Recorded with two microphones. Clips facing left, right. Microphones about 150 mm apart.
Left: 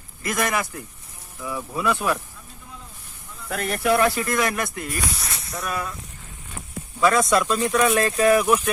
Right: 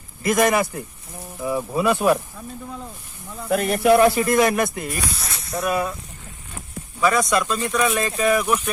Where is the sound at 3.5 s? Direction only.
15° right (ahead or behind).